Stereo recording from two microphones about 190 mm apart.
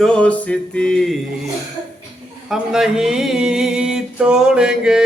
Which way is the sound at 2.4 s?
5° right (ahead or behind).